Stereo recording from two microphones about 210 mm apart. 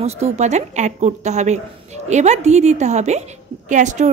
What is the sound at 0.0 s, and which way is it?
A woman's voice, 30° right (ahead or behind).